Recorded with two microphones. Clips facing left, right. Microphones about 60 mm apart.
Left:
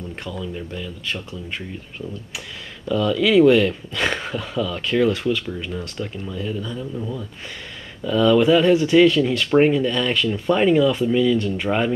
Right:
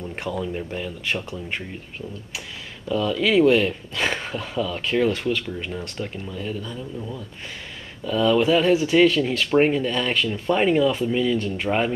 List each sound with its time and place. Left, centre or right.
0.3 s speech: right
0.6 s speech: right
2.9 s speech: centre
8.0 s speech: centre
11.4 s speech: centre